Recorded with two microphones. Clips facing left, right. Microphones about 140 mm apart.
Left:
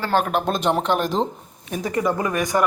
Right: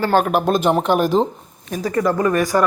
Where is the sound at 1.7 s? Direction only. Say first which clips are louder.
Right 3 dB; 20° left (ahead or behind).